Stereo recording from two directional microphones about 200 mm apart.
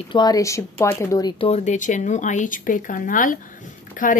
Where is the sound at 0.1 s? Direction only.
20° left (ahead or behind).